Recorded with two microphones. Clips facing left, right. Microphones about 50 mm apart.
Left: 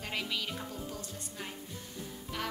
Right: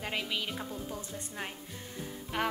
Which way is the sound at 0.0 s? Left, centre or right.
Centre.